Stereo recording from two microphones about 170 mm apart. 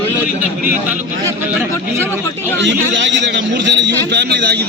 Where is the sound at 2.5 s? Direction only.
90° right.